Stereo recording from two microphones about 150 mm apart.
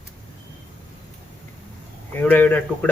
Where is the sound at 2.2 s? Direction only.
10° left (ahead or behind).